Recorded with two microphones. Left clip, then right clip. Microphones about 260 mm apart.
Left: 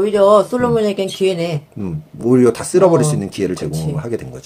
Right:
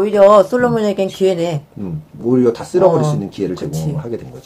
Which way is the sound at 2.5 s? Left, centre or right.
Left.